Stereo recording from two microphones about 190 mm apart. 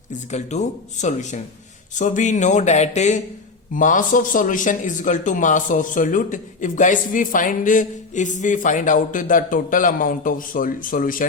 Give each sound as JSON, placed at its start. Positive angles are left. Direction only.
{"t": 0.1, "sound": "a man's voice", "side_deg": 40}